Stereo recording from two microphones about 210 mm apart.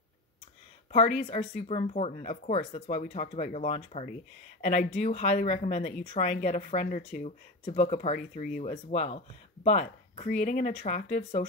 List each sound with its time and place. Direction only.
0.9 s speech: 35° left (ahead or behind)